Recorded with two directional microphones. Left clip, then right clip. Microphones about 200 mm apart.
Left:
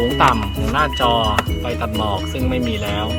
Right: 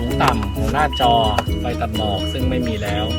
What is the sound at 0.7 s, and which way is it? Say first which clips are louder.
Speech: right 1 dB; 10° right (ahead or behind).